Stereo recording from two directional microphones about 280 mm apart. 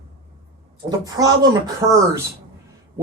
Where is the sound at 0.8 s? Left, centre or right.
Centre.